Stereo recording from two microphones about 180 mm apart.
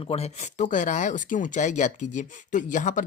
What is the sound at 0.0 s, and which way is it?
Speech, 35° left (ahead or behind).